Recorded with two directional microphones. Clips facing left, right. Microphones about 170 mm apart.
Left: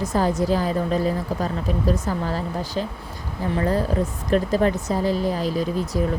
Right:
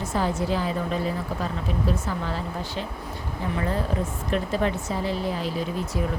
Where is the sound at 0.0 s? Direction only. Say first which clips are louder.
Left 4 dB; 40° left (ahead or behind).